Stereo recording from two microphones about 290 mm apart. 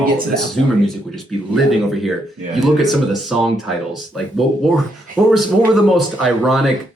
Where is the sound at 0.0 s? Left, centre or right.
Centre.